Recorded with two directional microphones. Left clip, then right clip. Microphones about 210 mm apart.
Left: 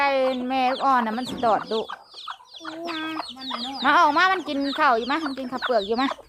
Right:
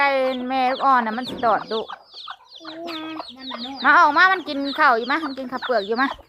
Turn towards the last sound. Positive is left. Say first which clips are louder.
# right 1 dB
turn(degrees=0)  # may be behind; listen again after turning